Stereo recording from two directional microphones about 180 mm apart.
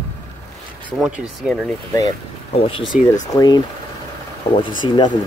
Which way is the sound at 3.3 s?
25° left (ahead or behind).